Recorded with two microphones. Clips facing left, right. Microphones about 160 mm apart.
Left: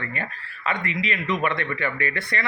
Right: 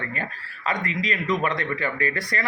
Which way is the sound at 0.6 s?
40° right (ahead or behind).